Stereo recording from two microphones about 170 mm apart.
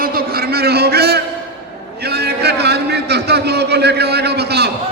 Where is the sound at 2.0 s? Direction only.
70° right (ahead or behind).